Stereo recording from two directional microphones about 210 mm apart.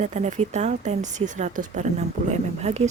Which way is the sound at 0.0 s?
30° right (ahead or behind).